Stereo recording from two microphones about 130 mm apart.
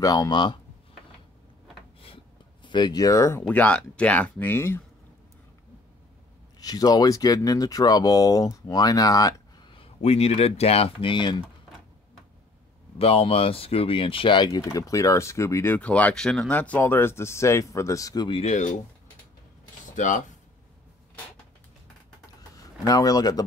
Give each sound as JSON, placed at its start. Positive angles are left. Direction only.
{"t": 0.0, "sound": "speech", "side_deg": 30}
{"t": 2.6, "sound": "speech", "side_deg": 35}
{"t": 3.4, "sound": "speech", "side_deg": 10}
{"t": 6.6, "sound": "speech", "side_deg": 30}
{"t": 13.0, "sound": "speech", "side_deg": 45}
{"t": 18.4, "sound": "speech", "side_deg": 60}
{"t": 20.0, "sound": "speech", "side_deg": 75}
{"t": 22.6, "sound": "speech", "side_deg": 30}